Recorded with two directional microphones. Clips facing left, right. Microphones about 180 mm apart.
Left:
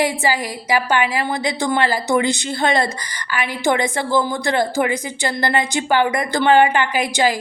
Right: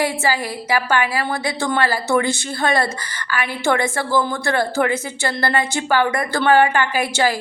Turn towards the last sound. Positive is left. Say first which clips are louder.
# left 1 dB
turn(degrees=15)  # may be behind; listen again after turning